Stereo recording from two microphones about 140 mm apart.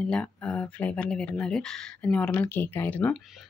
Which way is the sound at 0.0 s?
5° left (ahead or behind).